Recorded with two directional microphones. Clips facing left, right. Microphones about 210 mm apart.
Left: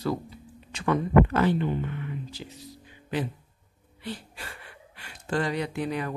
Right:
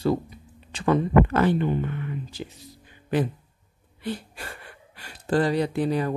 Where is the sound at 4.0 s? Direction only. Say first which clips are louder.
Right 5 dB; 45° right (ahead or behind).